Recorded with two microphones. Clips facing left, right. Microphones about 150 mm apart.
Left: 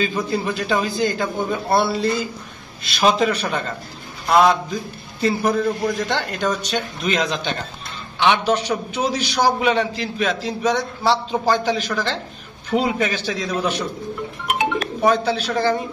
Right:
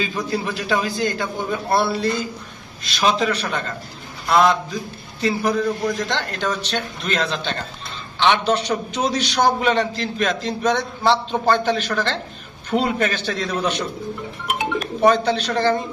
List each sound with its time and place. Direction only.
0.0 s a man's voice: centre (ahead or behind)
15.0 s a man's voice: 5° left (ahead or behind)